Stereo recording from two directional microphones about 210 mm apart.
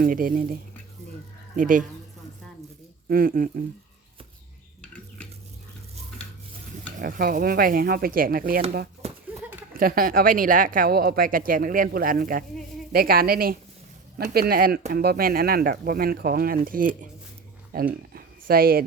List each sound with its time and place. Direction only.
0.0 s speech: 45° right (ahead or behind)
3.1 s speech: 40° right (ahead or behind)
7.0 s speech: 40° right (ahead or behind)
9.0 s a sound: 30° right (ahead or behind)
9.7 s speech: 45° right (ahead or behind)